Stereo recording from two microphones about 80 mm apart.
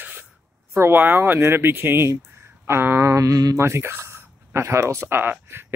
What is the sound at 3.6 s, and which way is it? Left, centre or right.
Speech, right.